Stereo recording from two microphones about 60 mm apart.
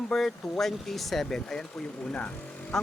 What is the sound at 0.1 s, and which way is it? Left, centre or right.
Speech, centre.